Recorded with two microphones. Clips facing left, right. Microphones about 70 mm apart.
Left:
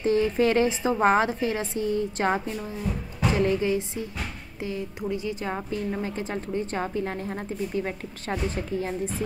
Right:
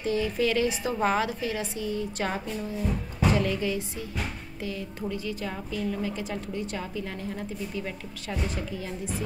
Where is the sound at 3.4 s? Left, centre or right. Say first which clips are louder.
Left 5 dB; left.